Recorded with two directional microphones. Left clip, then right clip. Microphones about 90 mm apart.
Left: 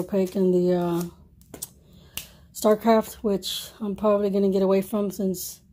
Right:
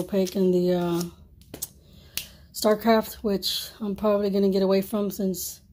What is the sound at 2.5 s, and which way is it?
A woman's voice, 40° left (ahead or behind).